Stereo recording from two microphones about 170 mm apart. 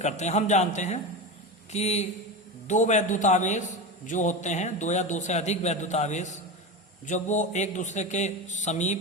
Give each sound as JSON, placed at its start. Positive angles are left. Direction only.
{"t": 0.0, "sound": "a man's voice", "side_deg": 45}